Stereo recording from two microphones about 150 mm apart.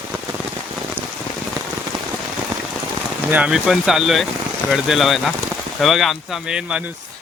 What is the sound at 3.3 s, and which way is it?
Speech, 5° right (ahead or behind).